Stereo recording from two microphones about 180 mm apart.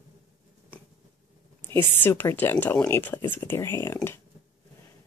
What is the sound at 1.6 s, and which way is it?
Speech, 10° left (ahead or behind).